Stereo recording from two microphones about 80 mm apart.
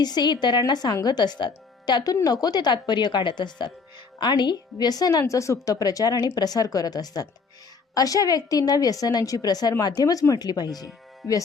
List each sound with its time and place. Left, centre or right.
0.0 s speech: left
0.7 s speech: left
2.2 s speech: left
5.2 s a woman's voice: left